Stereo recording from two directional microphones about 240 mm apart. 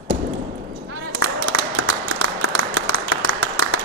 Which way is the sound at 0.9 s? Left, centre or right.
Right.